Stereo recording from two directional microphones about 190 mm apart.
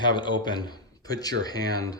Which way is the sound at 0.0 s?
25° left (ahead or behind).